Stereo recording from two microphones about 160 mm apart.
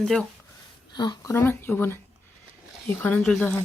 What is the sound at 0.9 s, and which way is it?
Speech, 25° left (ahead or behind).